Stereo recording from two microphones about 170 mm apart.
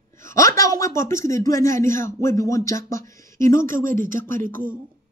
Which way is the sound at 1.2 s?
20° left (ahead or behind).